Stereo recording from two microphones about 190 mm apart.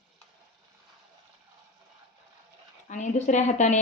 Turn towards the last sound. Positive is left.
turn(degrees=40)  # may be behind; listen again after turning